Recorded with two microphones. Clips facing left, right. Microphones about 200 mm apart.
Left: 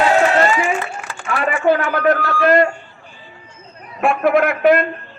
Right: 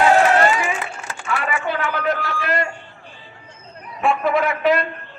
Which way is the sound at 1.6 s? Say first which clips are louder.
Left 7 dB; 45° left (ahead or behind).